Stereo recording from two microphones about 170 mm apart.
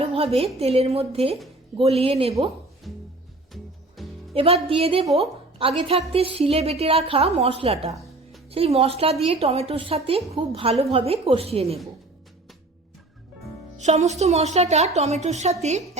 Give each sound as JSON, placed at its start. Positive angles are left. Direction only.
{"t": 0.0, "sound": "a woman's voice", "side_deg": -35}
{"t": 4.0, "sound": "music", "side_deg": 0}
{"t": 4.4, "sound": "a woman's voice", "side_deg": -35}
{"t": 13.7, "sound": "a woman's voice", "side_deg": -40}